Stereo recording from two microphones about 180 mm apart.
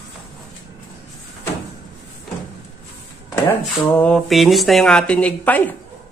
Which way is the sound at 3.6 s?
5° left (ahead or behind).